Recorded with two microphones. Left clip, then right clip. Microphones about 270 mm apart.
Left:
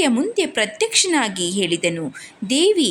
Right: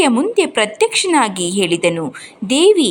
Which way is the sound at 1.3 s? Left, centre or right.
Centre.